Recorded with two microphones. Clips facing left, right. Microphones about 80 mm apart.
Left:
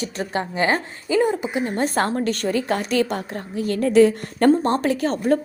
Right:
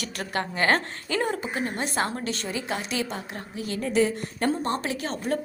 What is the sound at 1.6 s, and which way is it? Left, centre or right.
A woman's voice, left.